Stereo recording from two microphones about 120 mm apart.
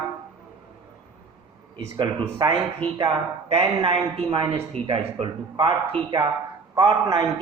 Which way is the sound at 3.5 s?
55° right (ahead or behind).